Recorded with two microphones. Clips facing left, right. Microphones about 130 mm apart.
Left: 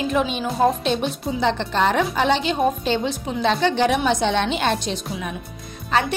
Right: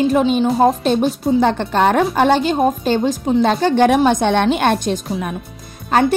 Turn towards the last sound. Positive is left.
turn(degrees=-45)  # may be behind; listen again after turning